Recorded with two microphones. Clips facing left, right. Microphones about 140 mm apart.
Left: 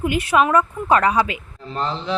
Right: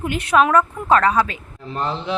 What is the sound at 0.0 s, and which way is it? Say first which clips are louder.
A woman's voice: even; 5° left (ahead or behind).